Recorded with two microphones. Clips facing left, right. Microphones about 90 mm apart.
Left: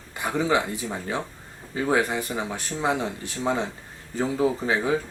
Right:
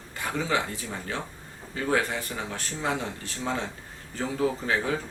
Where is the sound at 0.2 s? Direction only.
15° left (ahead or behind).